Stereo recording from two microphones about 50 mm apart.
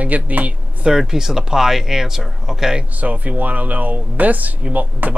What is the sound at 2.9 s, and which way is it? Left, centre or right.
Speech, right.